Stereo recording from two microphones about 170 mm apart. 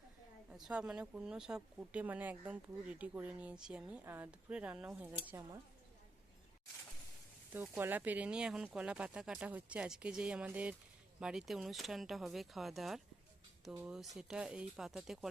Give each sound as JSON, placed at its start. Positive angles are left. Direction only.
{"t": 0.5, "sound": "speech", "side_deg": -5}
{"t": 7.5, "sound": "speech", "side_deg": -10}